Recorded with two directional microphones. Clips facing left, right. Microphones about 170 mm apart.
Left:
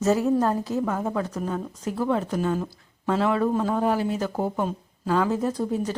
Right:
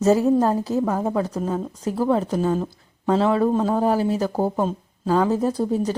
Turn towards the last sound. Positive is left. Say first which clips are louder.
# right 4 dB
turn(degrees=-35)  # may be behind; listen again after turning